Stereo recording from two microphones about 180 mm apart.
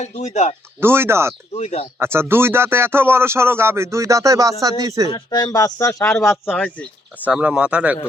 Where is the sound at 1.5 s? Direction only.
35° left (ahead or behind).